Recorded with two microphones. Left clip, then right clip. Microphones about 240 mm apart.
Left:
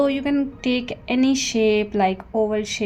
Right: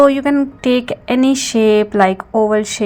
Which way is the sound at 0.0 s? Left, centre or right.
Centre.